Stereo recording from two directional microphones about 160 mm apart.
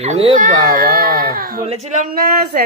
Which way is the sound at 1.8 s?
50° right (ahead or behind).